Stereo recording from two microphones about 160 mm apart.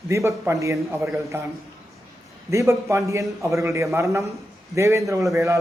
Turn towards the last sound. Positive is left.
turn(degrees=-20)  # may be behind; listen again after turning